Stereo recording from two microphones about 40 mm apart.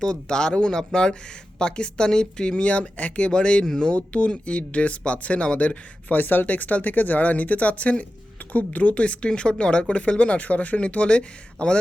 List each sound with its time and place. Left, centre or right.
0.0 s speech: centre
6.1 s speech: left